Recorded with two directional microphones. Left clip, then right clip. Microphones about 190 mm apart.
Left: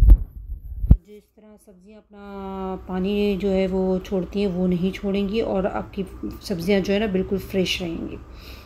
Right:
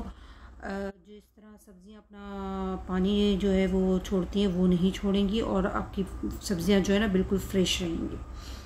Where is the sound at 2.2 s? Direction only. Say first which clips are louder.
Left 4 dB; centre (ahead or behind).